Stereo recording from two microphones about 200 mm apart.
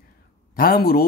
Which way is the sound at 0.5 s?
45° left (ahead or behind).